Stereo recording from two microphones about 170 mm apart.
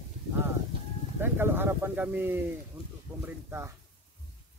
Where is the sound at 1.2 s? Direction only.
15° right (ahead or behind).